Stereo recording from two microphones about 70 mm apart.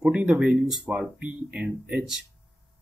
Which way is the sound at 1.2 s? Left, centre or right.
Centre.